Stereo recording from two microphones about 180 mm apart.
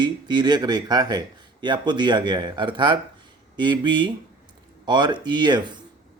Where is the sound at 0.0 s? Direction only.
25° right (ahead or behind).